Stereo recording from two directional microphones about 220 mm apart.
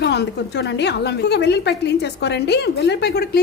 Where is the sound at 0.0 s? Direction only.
50° left (ahead or behind).